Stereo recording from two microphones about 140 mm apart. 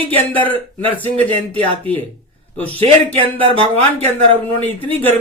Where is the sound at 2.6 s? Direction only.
10° left (ahead or behind).